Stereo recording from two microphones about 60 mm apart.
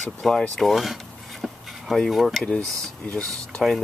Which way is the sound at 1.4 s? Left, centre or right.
Centre.